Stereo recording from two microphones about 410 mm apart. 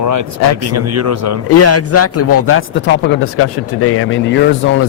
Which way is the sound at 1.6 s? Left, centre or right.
Left.